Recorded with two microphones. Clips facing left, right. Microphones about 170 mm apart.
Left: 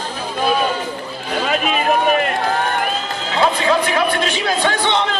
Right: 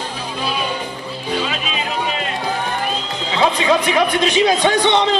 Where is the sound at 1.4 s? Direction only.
55° left (ahead or behind).